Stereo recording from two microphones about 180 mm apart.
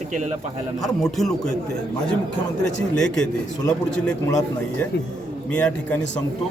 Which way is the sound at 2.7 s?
85° left.